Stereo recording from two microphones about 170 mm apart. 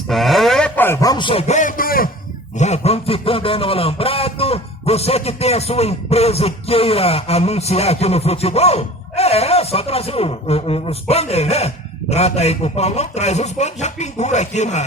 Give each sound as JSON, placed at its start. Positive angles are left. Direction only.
{"t": 0.1, "sound": "a sound", "side_deg": 0}
{"t": 1.1, "sound": "a man's voice", "side_deg": 30}
{"t": 2.6, "sound": "speech", "side_deg": 40}